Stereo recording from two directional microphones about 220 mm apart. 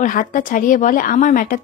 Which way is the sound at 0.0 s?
35° left (ahead or behind).